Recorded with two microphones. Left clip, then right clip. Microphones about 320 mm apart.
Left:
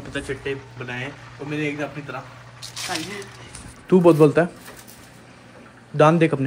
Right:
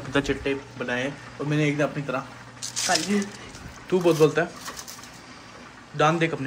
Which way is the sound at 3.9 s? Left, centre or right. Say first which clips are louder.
Left 5 dB; centre.